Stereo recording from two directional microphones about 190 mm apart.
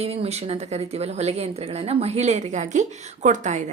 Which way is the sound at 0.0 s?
30° right (ahead or behind).